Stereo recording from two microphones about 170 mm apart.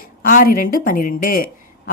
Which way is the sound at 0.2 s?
55° left (ahead or behind).